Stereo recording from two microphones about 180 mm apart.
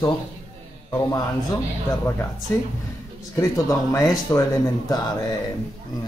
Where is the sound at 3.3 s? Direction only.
20° left (ahead or behind).